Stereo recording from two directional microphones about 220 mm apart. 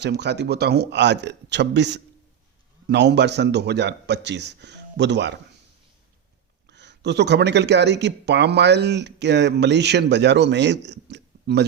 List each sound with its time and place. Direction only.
0.0 s speech: 50° right (ahead or behind)
6.7 s speech: 50° right (ahead or behind)